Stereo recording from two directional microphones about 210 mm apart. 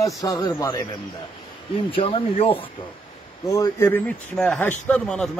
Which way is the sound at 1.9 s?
25° left (ahead or behind).